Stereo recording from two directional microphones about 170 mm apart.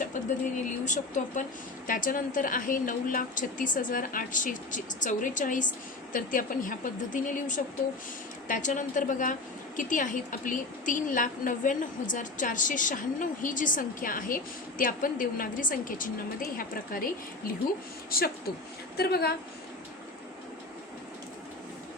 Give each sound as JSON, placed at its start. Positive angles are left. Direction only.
{"t": 0.0, "sound": "a woman's voice", "side_deg": 45}